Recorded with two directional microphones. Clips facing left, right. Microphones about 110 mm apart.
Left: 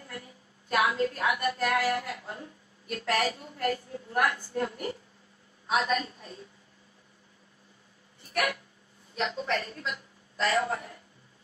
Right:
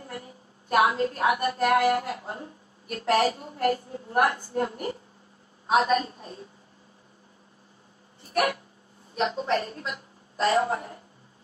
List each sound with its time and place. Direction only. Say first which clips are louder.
0.0 s a sound: right 4 dB; 35° right (ahead or behind)
1.9 s a woman's voice: right 5 dB; 35° right (ahead or behind)
9.2 s a woman's voice: right 5 dB; 30° right (ahead or behind)